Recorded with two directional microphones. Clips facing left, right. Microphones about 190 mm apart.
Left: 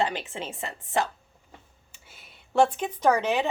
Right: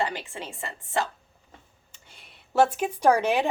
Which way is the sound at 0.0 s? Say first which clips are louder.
Left 2 dB; 20° left (ahead or behind).